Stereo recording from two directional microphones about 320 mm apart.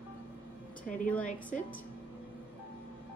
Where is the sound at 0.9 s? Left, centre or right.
Centre.